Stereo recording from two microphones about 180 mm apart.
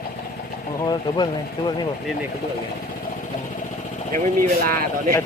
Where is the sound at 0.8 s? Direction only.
25° left (ahead or behind).